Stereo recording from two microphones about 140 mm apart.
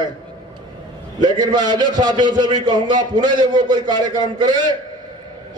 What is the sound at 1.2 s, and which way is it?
A man's voice, 30° right (ahead or behind).